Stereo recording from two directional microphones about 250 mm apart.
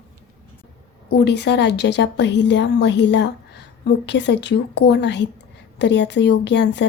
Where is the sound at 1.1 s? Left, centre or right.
Left.